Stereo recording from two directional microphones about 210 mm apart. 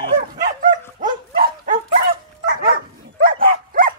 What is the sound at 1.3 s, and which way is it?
Dog, 40° right (ahead or behind).